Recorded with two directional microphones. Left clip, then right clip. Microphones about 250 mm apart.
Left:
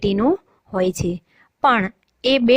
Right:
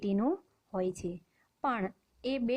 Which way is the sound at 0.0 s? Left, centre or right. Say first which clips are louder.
Left 14 dB; left.